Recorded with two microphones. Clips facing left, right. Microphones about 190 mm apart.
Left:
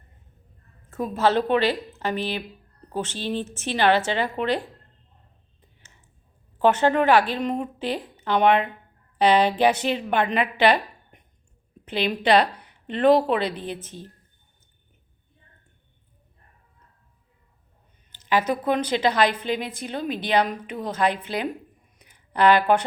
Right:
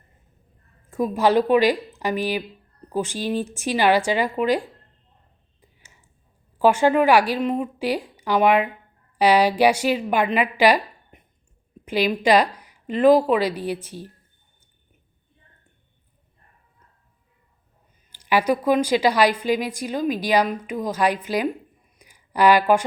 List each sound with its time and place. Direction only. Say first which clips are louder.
0.9 s a woman's voice: right 3 dB; 10° right (ahead or behind)
6.6 s a woman's voice: right 2 dB; 10° right (ahead or behind)
18.1 s a woman's voice: right 3 dB; 10° right (ahead or behind)
20.1 s a woman's voice: right 1 dB; 25° left (ahead or behind)
21.9 s a sound: right 2 dB; 10° right (ahead or behind)